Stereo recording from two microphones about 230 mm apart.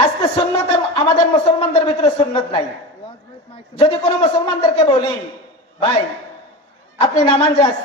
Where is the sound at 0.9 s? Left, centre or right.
Left.